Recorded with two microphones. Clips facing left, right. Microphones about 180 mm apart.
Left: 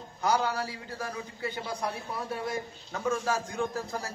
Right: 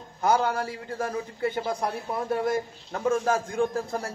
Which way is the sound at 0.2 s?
50° right (ahead or behind).